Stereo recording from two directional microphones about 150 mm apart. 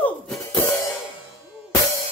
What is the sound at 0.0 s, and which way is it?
Music, 10° left (ahead or behind).